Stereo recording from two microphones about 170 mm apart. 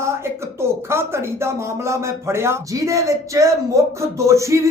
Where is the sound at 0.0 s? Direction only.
15° right (ahead or behind).